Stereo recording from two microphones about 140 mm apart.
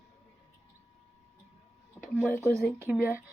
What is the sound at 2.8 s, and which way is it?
Speech, 15° right (ahead or behind).